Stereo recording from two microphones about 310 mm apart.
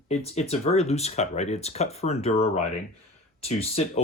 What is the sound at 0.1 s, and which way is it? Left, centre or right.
Speech, centre.